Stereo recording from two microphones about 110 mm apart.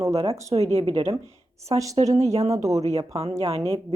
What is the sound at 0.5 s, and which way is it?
Speech, 70° right (ahead or behind).